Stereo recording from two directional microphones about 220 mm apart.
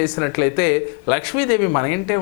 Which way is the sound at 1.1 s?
5° left (ahead or behind).